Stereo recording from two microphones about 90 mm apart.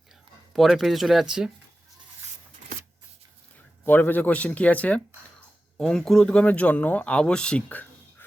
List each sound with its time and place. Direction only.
0.5 s speech: centre (ahead or behind)
3.8 s speech: 20° left (ahead or behind)
5.7 s speech: 5° left (ahead or behind)